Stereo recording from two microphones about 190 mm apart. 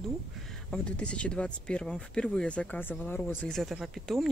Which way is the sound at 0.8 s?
5° left (ahead or behind).